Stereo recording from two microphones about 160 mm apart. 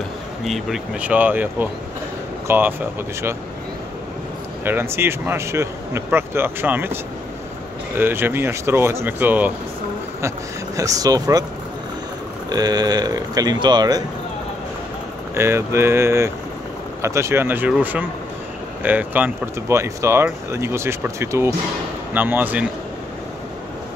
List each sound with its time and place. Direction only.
0.5 s speech: 5° right (ahead or behind)
4.6 s speech: 15° right (ahead or behind)
8.0 s speech: 15° right (ahead or behind)
10.8 s speech: 20° right (ahead or behind)
12.4 s speech: 25° right (ahead or behind)
15.3 s speech: 15° right (ahead or behind)